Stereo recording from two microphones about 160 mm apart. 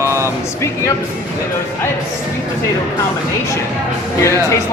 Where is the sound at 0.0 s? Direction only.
20° right (ahead or behind).